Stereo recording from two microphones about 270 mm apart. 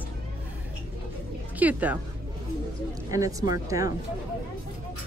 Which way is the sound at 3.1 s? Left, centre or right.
Centre.